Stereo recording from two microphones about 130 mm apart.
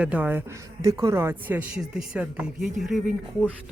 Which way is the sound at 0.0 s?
10° right (ahead or behind).